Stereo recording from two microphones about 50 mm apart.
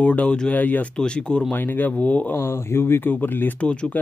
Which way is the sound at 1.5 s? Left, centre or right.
Left.